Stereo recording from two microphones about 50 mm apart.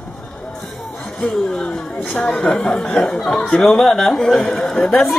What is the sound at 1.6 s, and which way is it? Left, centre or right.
Speech, centre.